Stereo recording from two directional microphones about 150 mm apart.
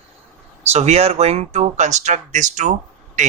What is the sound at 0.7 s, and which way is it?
Speech, 45° right (ahead or behind).